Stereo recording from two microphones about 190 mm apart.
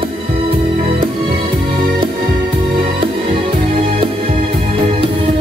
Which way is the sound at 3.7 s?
30° right (ahead or behind).